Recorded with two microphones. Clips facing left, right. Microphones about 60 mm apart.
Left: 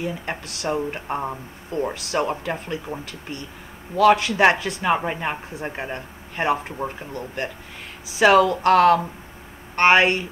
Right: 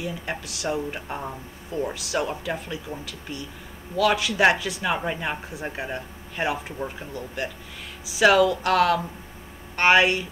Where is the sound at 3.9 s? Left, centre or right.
Left.